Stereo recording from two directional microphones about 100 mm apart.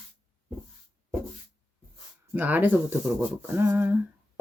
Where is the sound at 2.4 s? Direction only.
20° right (ahead or behind).